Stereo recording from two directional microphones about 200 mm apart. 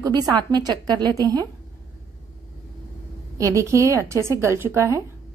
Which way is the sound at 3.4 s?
15° right (ahead or behind).